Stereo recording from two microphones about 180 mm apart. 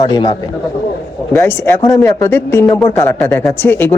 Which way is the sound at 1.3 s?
15° left (ahead or behind).